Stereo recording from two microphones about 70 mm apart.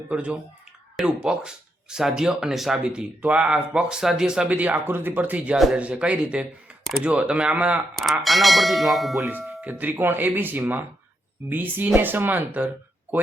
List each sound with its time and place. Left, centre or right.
0.1 s speech: centre
4.4 s speech: right
7.9 s speech: centre
9.6 s speech: right